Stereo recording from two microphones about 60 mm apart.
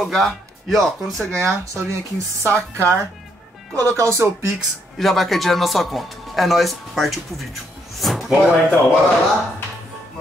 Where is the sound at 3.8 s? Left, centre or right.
Right.